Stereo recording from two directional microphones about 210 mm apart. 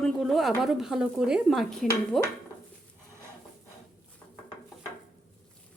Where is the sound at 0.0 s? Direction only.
Centre (ahead or behind).